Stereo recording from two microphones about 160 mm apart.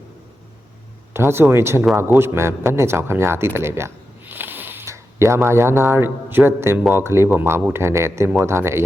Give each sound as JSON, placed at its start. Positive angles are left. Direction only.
{"t": 1.1, "sound": "a man's voice", "side_deg": -15}